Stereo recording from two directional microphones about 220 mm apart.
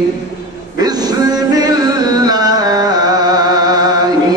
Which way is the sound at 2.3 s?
15° right (ahead or behind).